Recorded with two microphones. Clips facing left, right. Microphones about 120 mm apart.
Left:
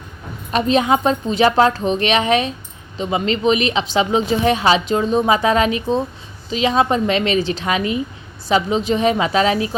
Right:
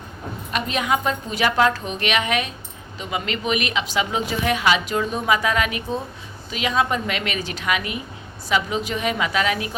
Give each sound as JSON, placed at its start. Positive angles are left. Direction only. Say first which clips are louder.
{"t": 0.5, "sound": "a woman's voice", "louder": "left 7 dB", "side_deg": 30}